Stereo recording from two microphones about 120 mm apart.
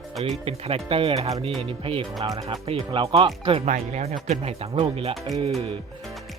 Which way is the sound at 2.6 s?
55° right (ahead or behind).